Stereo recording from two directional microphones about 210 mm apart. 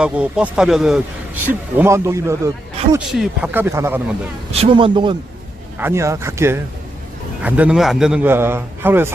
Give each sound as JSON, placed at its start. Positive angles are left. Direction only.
{"t": 0.0, "sound": "a man's voice", "side_deg": -5}
{"t": 4.6, "sound": "a man's voice", "side_deg": -25}